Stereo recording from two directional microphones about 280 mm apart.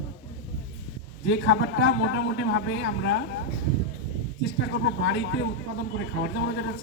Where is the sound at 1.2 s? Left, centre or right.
Left.